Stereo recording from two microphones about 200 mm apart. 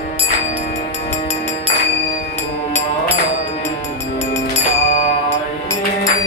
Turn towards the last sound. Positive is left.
turn(degrees=35)  # may be behind; listen again after turning